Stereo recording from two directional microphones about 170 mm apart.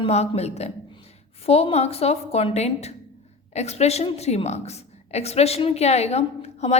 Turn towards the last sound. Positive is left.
turn(degrees=40)  # may be behind; listen again after turning